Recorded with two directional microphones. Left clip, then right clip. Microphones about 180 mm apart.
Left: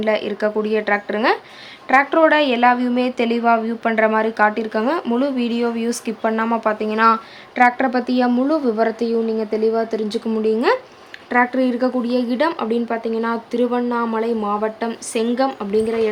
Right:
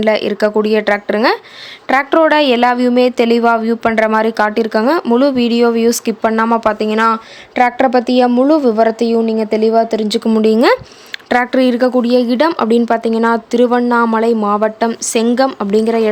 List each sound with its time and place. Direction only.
0.0 s a woman's voice: 35° right (ahead or behind)